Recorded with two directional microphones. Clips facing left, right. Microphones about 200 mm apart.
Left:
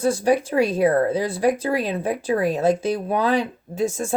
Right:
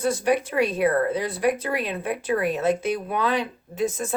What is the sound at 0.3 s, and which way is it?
Speech, 35° left (ahead or behind).